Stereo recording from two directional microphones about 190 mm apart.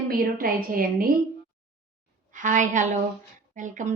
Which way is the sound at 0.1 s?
50° right (ahead or behind).